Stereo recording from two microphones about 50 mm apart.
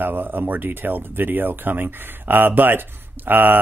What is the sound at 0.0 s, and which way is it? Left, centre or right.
Speech, right.